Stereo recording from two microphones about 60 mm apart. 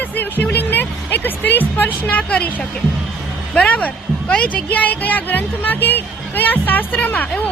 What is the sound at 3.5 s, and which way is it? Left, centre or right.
Speech, left.